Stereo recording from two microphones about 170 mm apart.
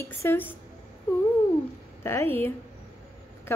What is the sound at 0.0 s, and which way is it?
Speech, 15° left (ahead or behind).